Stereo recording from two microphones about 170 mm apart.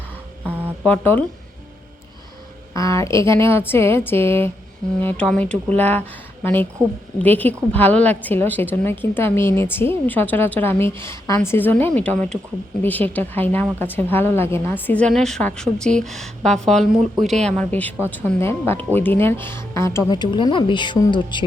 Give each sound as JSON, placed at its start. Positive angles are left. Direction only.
{"t": 0.9, "sound": "a woman's voice", "side_deg": 10}
{"t": 2.7, "sound": "a woman's voice", "side_deg": 20}